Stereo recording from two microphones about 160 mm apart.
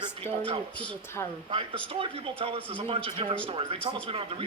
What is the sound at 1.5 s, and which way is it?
Speech, 30° right (ahead or behind).